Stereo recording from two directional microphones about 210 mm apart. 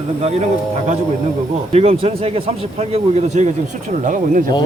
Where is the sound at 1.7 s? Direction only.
30° right (ahead or behind).